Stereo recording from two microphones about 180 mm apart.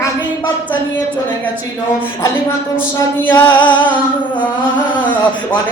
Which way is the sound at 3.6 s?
25° left (ahead or behind).